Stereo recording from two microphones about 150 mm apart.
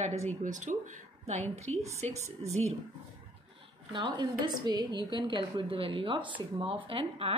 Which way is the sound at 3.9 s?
30° right (ahead or behind).